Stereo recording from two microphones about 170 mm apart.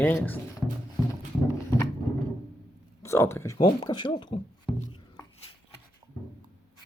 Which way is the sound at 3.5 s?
25° left (ahead or behind).